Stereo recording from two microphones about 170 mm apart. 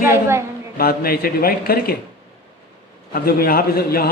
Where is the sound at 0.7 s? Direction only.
60° left (ahead or behind).